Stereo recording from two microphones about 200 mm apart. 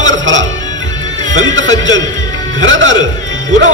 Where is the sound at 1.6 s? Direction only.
70° right (ahead or behind).